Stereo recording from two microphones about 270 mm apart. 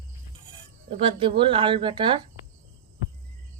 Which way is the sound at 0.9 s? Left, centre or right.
Right.